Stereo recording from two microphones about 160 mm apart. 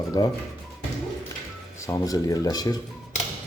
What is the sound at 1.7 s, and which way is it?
Speech, 20° left (ahead or behind).